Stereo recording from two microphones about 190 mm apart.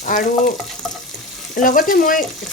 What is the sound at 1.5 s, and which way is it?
Speech, 45° left (ahead or behind).